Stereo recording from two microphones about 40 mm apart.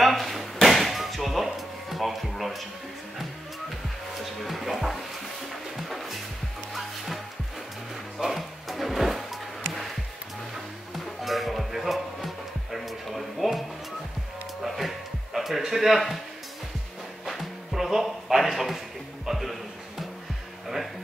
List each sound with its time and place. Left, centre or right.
0.0 s chop: centre
4.2 s music: centre
8.2 s music: centre
11.2 s music: centre
15.6 s speech: centre
17.2 s music: centre